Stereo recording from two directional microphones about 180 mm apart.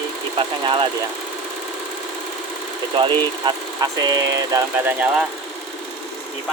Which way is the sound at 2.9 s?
30° right (ahead or behind).